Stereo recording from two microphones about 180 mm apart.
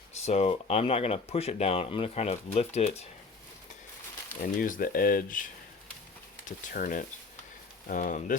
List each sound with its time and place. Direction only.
0.3 s speech: 35° left (ahead or behind)
4.5 s speech: 50° left (ahead or behind)